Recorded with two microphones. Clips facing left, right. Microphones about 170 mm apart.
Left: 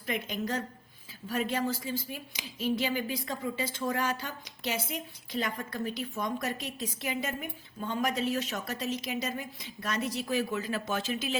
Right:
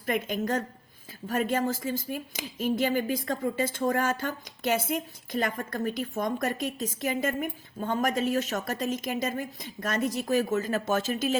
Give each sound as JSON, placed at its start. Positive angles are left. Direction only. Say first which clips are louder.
{"t": 0.0, "sound": "speech", "louder": "right 5 dB", "side_deg": -50}